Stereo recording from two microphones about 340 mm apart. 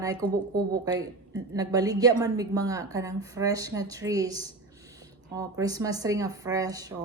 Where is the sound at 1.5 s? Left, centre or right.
Centre.